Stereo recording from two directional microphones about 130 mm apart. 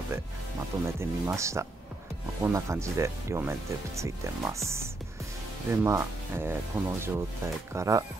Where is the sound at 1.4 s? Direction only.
20° right (ahead or behind).